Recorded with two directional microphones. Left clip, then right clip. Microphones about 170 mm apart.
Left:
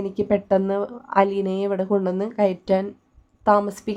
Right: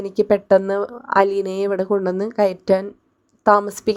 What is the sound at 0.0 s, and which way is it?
Speech, 30° right (ahead or behind).